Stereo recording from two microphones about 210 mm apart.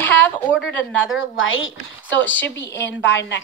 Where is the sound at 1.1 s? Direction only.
70° left (ahead or behind).